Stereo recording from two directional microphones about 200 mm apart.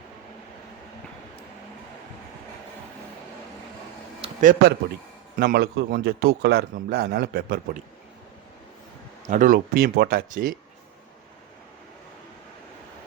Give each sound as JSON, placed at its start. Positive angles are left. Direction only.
{"t": 4.2, "sound": "a sound", "side_deg": -40}
{"t": 5.4, "sound": "a man's voice", "side_deg": -55}
{"t": 9.2, "sound": "a man's voice", "side_deg": -40}